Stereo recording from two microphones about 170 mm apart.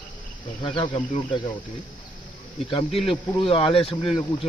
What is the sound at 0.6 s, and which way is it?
Speech, 30° left (ahead or behind).